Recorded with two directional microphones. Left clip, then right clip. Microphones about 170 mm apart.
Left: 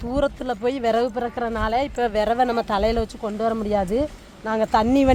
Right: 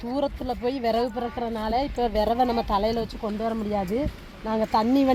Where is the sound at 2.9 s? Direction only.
30° left (ahead or behind).